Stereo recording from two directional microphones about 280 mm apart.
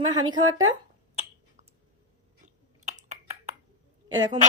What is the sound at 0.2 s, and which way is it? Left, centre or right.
Speech, centre.